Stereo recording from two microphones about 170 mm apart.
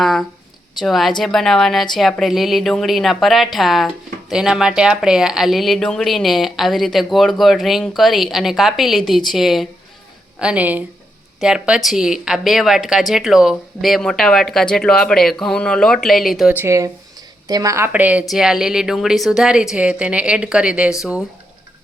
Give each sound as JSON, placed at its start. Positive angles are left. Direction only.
{"t": 0.0, "sound": "speech", "side_deg": 0}
{"t": 16.6, "sound": "speech", "side_deg": -15}